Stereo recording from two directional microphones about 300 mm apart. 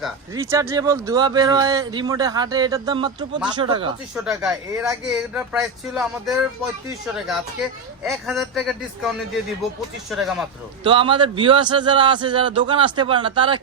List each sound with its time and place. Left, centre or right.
0.3 s speech: centre
10.8 s speech: centre